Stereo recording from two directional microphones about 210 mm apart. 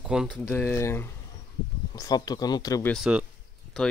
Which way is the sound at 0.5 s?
10° left (ahead or behind).